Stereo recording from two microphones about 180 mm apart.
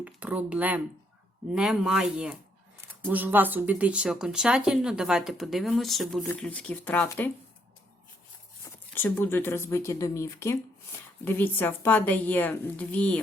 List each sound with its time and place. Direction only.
0.0 s speech: 10° right (ahead or behind); by 7.3 s 10° left (ahead or behind)
8.6 s speech: 10° left (ahead or behind)